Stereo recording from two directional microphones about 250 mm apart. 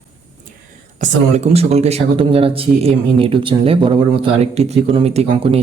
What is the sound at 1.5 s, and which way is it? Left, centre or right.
Speech, right.